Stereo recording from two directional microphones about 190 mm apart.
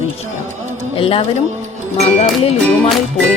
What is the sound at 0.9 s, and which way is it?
Speech, 30° left (ahead or behind).